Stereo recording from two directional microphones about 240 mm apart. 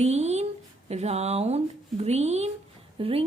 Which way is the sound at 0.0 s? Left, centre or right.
Right.